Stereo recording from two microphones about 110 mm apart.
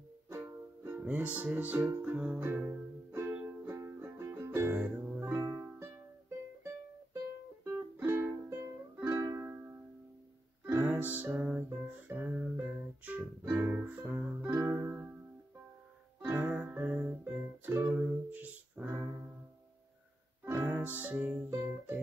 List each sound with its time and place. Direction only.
0.3 s music: 20° right (ahead or behind)
5.3 s music: 25° right (ahead or behind)
7.6 s music: 20° right (ahead or behind)
9.4 s music: 20° right (ahead or behind)
10.8 s music: 15° right (ahead or behind)
16.2 s music: 20° right (ahead or behind)
20.4 s music: 20° right (ahead or behind)
21.5 s music: 25° right (ahead or behind)